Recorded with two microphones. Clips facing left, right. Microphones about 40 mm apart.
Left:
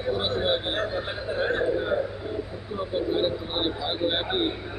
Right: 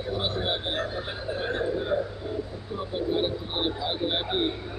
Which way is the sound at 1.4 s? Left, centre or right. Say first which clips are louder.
Left 5 dB; left.